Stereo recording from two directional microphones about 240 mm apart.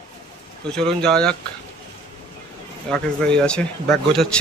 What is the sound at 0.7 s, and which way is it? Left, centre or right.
Speech, centre.